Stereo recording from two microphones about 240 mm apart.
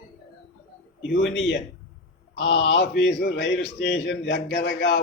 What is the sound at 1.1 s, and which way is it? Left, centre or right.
A man's voice, left.